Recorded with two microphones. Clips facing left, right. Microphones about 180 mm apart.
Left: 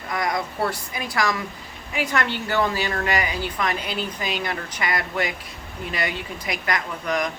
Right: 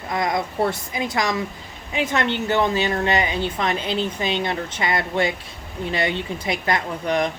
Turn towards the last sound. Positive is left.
turn(degrees=-30)  # may be behind; listen again after turning